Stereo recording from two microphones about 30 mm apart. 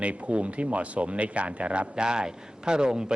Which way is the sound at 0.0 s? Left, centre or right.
Right.